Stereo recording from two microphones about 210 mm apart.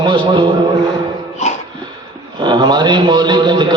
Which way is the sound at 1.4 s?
30° left (ahead or behind).